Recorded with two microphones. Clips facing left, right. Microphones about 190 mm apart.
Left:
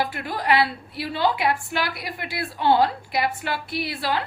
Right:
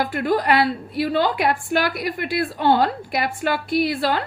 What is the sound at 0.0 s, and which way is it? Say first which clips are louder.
A woman's voice: right 6 dB; 50° right (ahead or behind).